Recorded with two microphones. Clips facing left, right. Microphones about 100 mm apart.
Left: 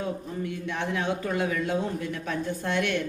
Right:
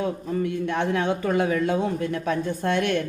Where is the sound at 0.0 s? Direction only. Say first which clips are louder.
Right 6 dB; 60° right (ahead or behind).